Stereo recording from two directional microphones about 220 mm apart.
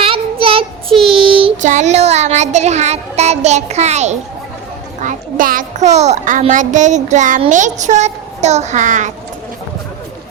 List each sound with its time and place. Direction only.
0.0 s child singing: 25° right (ahead or behind)
0.9 s child singing: centre (ahead or behind)
1.2 s child singing: 25° right (ahead or behind)
5.0 s a child's voice: 40° right (ahead or behind)